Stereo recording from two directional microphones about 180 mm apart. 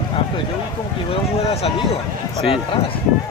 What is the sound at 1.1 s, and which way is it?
Speech, 35° left (ahead or behind).